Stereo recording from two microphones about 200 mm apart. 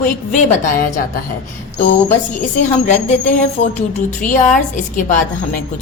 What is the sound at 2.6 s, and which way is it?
A woman's voice, 35° left (ahead or behind).